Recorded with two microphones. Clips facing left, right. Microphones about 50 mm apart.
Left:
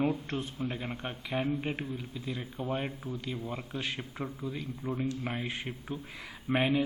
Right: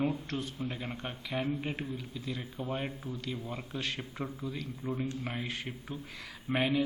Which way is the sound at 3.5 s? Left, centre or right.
Centre.